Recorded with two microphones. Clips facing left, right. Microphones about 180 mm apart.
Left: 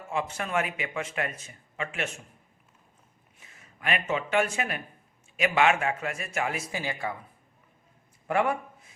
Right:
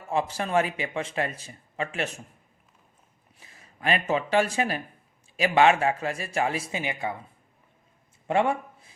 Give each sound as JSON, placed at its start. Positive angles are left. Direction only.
{"t": 0.1, "sound": "a man's voice", "side_deg": -35}
{"t": 3.4, "sound": "a man's voice", "side_deg": -35}
{"t": 8.3, "sound": "a sound", "side_deg": -25}